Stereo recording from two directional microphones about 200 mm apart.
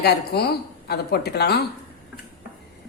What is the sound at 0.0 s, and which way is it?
A woman's voice, 55° left (ahead or behind).